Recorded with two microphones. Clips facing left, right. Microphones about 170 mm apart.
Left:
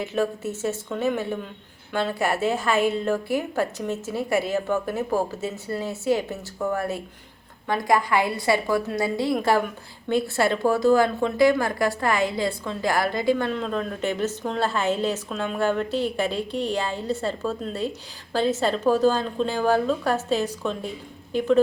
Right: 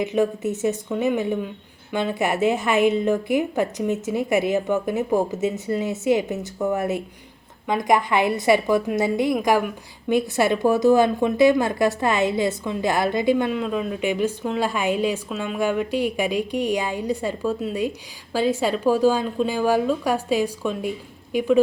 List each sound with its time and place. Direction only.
0.0 s a woman's voice: 20° right (ahead or behind)